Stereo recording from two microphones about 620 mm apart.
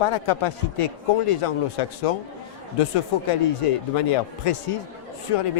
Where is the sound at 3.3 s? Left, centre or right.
Left.